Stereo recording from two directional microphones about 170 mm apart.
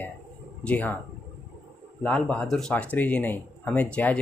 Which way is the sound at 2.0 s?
5° left (ahead or behind).